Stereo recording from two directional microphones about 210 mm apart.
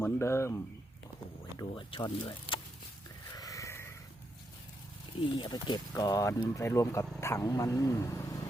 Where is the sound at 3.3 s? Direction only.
15° left (ahead or behind).